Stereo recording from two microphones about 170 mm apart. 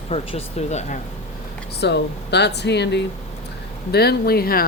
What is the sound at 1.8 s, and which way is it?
Speech, 80° left.